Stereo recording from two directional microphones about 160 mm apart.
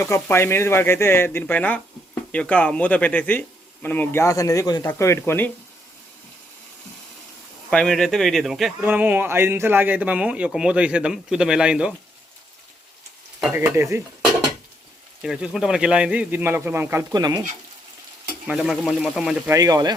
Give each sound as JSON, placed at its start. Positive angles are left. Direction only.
{"t": 0.0, "sound": "speech", "side_deg": 15}
{"t": 7.7, "sound": "speech", "side_deg": 5}
{"t": 8.8, "sound": "speech", "side_deg": -10}
{"t": 13.4, "sound": "speech", "side_deg": -15}
{"t": 15.2, "sound": "speech", "side_deg": -5}
{"t": 18.4, "sound": "speech", "side_deg": -5}
{"t": 19.5, "sound": "speech", "side_deg": -20}